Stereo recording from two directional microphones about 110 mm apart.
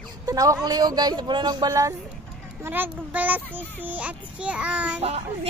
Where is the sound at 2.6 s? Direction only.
20° right (ahead or behind).